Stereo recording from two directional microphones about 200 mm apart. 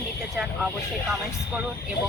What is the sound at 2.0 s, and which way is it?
Speech, 45° left (ahead or behind).